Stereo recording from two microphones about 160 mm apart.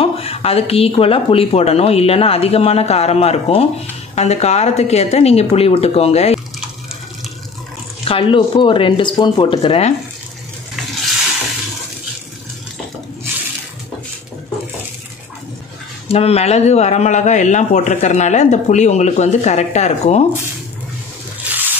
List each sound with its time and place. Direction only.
0.0 s speech: 40° left (ahead or behind)
8.0 s speech: 35° left (ahead or behind)
16.1 s speech: 40° left (ahead or behind)
21.5 s a sound: 10° right (ahead or behind)